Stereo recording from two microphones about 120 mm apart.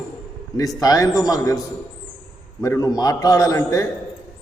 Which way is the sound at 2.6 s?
25° left (ahead or behind).